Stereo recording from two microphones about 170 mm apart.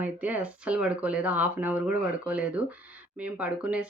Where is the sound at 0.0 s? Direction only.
10° right (ahead or behind).